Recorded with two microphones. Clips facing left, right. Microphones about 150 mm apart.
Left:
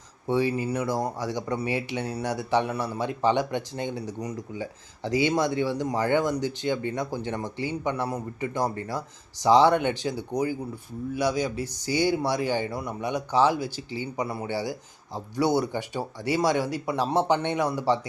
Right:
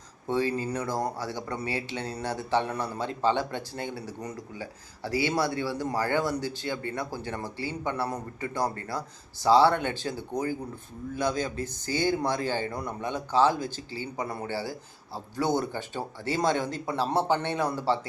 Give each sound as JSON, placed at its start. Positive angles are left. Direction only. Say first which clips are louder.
{"t": 0.3, "sound": "speech", "louder": "left 3 dB", "side_deg": 15}